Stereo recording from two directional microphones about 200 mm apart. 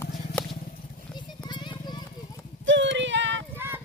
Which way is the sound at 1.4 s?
20° left (ahead or behind).